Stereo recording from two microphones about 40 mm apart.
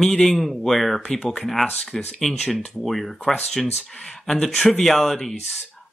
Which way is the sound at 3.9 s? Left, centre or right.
Centre.